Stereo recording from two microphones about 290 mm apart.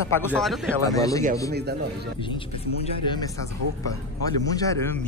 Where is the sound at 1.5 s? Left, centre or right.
Right.